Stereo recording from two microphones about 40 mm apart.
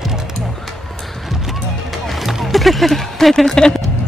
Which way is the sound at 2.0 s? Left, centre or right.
Centre.